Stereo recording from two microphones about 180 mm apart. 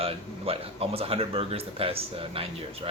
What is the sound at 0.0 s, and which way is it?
Speech, 35° right (ahead or behind).